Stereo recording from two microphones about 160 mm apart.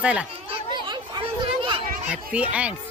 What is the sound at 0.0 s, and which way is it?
Speech, 5° right (ahead or behind).